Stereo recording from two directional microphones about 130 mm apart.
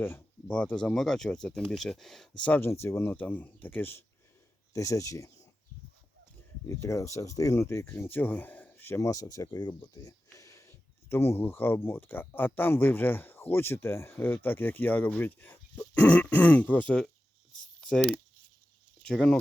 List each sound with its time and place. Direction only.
0.0 s speech: 10° left (ahead or behind)
2.4 s speech: 15° left (ahead or behind)
6.7 s speech: 20° left (ahead or behind)
17.7 s a sound: 5° left (ahead or behind)
19.0 s speech: 5° left (ahead or behind)